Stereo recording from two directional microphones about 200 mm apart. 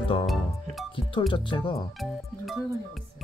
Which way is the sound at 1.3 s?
25° left (ahead or behind).